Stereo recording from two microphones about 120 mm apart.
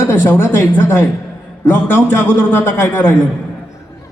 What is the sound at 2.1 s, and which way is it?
Speech, 20° left (ahead or behind).